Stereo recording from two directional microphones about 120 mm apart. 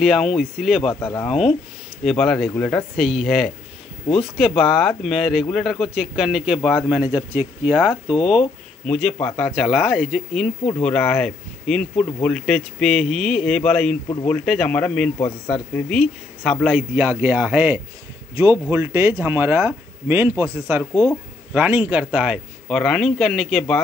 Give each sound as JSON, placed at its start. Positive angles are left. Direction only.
{"t": 0.0, "sound": "a man's voice", "side_deg": 0}
{"t": 8.1, "sound": "speech", "side_deg": 0}
{"t": 15.2, "sound": "speech", "side_deg": 35}
{"t": 15.9, "sound": "speech", "side_deg": 0}
{"t": 16.6, "sound": "a man's voice", "side_deg": -10}
{"t": 18.3, "sound": "speech", "side_deg": -25}
{"t": 20.9, "sound": "speech", "side_deg": 25}
{"t": 21.5, "sound": "speech", "side_deg": -15}